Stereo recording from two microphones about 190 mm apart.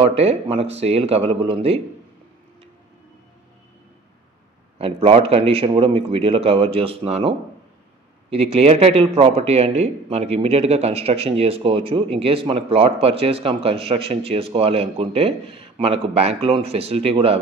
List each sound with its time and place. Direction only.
0.0 s a man's voice: 30° right (ahead or behind)
4.7 s a man's voice: 30° right (ahead or behind)